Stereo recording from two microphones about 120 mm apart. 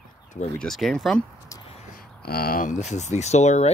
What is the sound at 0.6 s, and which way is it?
Speech, 5° left (ahead or behind).